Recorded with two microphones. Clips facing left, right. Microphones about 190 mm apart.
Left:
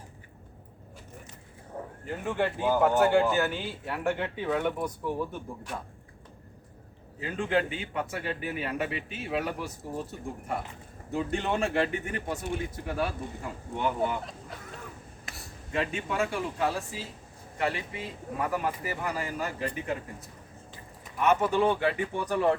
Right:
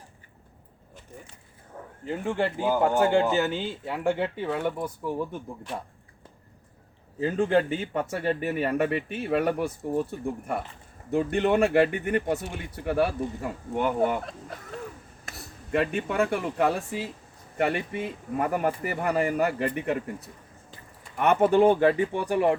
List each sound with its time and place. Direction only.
1.7 s a sound: 25° left (ahead or behind)
2.2 s speech: 15° right (ahead or behind)
7.2 s a man's voice: 40° right (ahead or behind)
15.3 s a man's voice: 55° right (ahead or behind)
21.9 s speech: 15° right (ahead or behind)